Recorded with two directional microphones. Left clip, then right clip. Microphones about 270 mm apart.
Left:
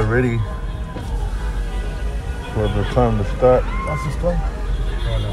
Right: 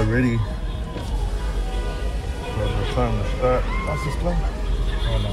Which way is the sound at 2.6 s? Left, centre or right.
Centre.